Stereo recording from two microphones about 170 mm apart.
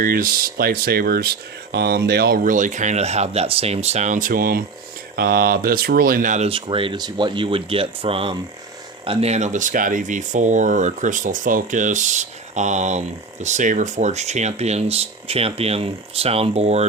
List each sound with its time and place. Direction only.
0.0 s speech: 60° right (ahead or behind)
6.5 s speech: 30° right (ahead or behind)